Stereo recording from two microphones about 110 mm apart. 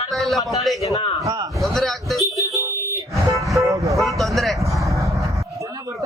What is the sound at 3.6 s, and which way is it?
Vehicle, 30° right (ahead or behind).